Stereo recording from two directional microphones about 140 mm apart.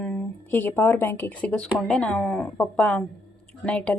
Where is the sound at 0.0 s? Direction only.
10° left (ahead or behind).